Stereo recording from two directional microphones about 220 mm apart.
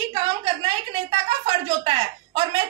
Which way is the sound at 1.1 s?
25° right (ahead or behind).